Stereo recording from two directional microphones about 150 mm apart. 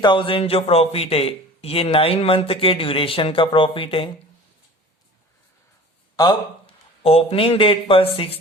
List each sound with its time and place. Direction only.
0.0 s a man's voice: 30° left (ahead or behind)
7.0 s a man's voice: 40° left (ahead or behind)